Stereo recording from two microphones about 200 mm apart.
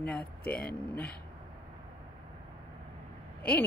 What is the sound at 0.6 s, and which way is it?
Speech, 5° left (ahead or behind).